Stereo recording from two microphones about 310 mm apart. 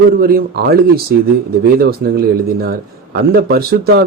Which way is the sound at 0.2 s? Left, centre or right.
Right.